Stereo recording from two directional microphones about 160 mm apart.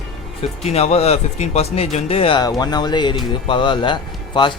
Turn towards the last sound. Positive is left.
turn(degrees=30)  # may be behind; listen again after turning